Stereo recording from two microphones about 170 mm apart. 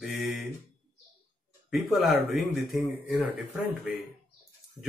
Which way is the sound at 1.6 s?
Centre (ahead or behind).